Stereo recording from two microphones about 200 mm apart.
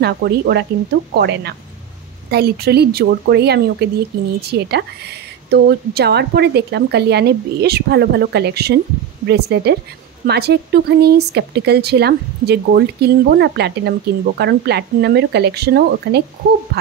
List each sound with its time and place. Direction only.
0.0 s speech: 55° right (ahead or behind)